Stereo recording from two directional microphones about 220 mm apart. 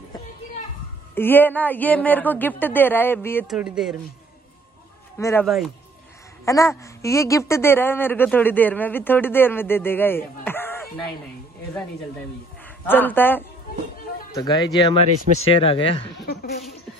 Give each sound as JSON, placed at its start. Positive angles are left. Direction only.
{"t": 1.1, "sound": "speech", "side_deg": 10}
{"t": 3.4, "sound": "speech", "side_deg": -5}
{"t": 5.2, "sound": "speech", "side_deg": 10}
{"t": 12.6, "sound": "speech", "side_deg": 10}